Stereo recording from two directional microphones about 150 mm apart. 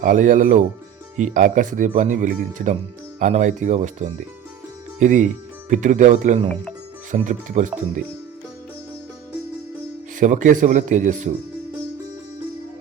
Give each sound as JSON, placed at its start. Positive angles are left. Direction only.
{"t": 0.0, "sound": "speech", "side_deg": -60}
{"t": 10.2, "sound": "speech", "side_deg": -60}